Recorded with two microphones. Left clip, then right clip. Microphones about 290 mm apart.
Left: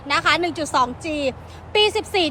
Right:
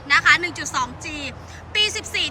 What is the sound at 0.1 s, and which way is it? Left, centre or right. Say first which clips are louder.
A woman's voice: right 3 dB; centre.